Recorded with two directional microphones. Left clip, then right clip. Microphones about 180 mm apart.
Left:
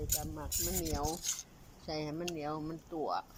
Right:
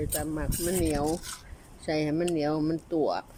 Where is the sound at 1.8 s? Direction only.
25° right (ahead or behind).